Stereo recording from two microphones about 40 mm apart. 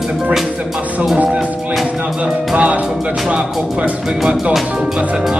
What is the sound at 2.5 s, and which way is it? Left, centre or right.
Speech, right.